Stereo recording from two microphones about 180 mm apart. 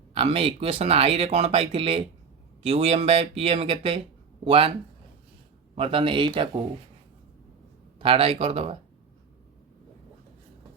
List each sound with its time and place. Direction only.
0.1 s speech: 35° right (ahead or behind)
5.7 s a man's voice: 30° right (ahead or behind)
7.9 s speech: 30° right (ahead or behind)